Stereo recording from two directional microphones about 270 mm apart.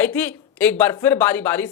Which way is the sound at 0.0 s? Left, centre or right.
Centre.